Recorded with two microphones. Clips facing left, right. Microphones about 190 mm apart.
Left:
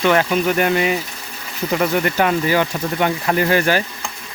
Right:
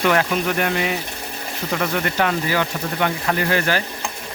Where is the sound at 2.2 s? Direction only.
20° left (ahead or behind).